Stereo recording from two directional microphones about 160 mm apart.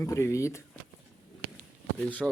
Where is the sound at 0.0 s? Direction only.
20° left (ahead or behind).